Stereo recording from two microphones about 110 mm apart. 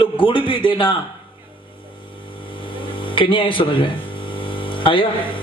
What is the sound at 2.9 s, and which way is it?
Speech, 50° left (ahead or behind).